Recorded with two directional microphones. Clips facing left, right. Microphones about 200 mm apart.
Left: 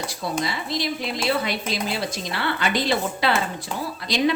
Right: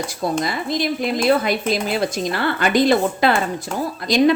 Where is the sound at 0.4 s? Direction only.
50° right (ahead or behind).